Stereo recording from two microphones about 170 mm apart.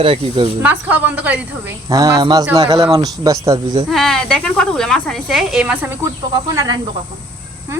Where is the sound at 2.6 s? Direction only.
35° right (ahead or behind).